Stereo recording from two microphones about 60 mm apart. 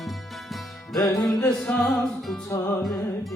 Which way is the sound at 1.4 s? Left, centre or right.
Left.